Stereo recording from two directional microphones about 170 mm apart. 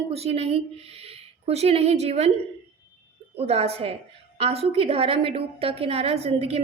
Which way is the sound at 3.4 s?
35° right (ahead or behind).